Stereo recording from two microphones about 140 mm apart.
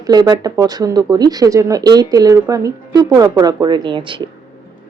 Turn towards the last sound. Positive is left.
turn(degrees=-35)  # may be behind; listen again after turning